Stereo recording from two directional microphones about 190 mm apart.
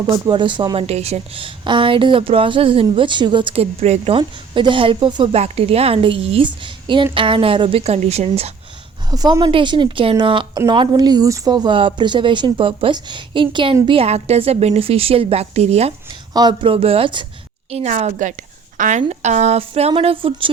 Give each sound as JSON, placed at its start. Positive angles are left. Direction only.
{"t": 0.0, "sound": "speech", "side_deg": -25}
{"t": 9.0, "sound": "speech", "side_deg": -20}
{"t": 16.3, "sound": "a woman's voice", "side_deg": -20}